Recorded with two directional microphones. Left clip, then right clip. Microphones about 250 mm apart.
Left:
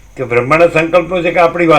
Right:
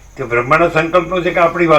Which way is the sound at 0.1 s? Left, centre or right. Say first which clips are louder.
Left 2 dB; left.